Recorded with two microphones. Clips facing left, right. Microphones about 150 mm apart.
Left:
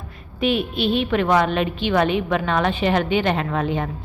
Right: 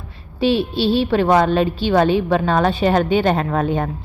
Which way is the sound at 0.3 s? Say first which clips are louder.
Right 4 dB; 30° right (ahead or behind).